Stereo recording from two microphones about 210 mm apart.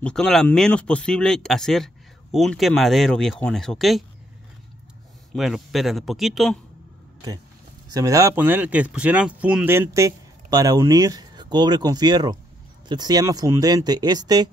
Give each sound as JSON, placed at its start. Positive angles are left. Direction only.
{"t": 0.0, "sound": "speech", "side_deg": 5}
{"t": 5.3, "sound": "speech", "side_deg": 0}
{"t": 7.9, "sound": "speech", "side_deg": -15}